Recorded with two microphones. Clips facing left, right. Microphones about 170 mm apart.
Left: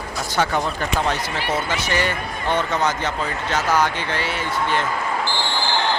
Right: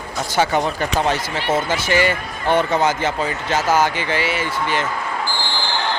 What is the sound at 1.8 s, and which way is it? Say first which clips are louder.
Speech: right 4 dB; 90° right.